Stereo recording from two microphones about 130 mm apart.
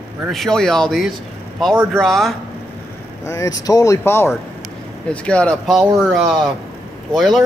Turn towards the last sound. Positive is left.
turn(degrees=0)  # may be behind; listen again after turning